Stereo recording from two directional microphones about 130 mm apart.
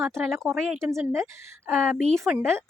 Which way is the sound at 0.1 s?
5° left (ahead or behind).